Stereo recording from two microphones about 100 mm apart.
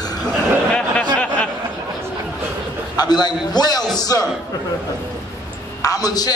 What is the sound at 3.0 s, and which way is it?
Speech, 45° left (ahead or behind).